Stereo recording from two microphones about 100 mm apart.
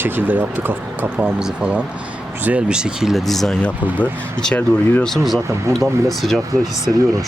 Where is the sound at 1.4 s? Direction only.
5° right (ahead or behind).